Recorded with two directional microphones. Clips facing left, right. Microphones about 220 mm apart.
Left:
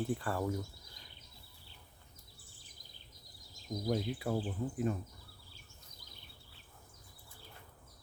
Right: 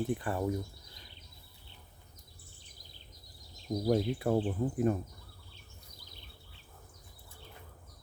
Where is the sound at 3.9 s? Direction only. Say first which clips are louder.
Right 6 dB; 50° right (ahead or behind).